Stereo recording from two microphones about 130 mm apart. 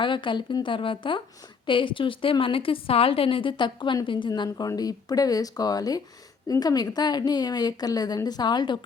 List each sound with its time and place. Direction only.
0.0 s a woman's voice: 40° left (ahead or behind)